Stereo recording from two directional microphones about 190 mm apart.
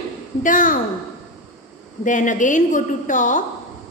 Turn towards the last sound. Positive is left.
turn(degrees=40)  # may be behind; listen again after turning